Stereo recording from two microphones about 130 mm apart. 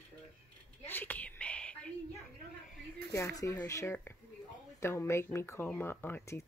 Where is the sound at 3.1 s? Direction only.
25° left (ahead or behind).